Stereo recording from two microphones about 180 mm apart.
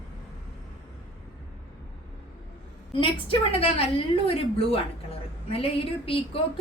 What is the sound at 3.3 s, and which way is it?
A woman's voice, 30° left (ahead or behind).